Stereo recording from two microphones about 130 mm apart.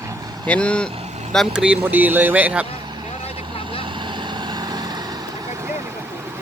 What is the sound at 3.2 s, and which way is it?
Vehicle, 45° left (ahead or behind).